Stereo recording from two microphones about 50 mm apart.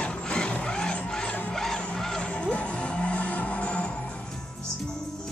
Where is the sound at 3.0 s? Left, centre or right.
Left.